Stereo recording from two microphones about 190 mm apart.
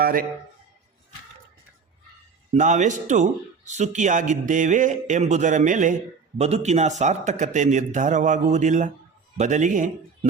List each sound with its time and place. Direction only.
0.0 s a man's voice: 50° right (ahead or behind)
2.5 s speech: 40° right (ahead or behind)